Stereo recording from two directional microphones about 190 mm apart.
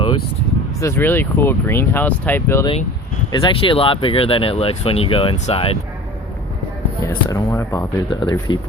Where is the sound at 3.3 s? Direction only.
25° left (ahead or behind).